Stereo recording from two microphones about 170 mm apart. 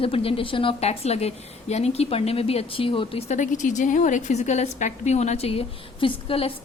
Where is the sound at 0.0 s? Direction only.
35° left (ahead or behind).